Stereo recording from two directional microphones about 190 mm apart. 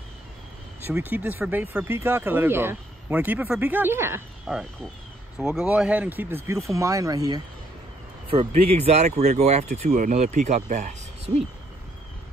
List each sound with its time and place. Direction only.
0.8 s speech: 10° right (ahead or behind)
8.3 s speech: 30° right (ahead or behind)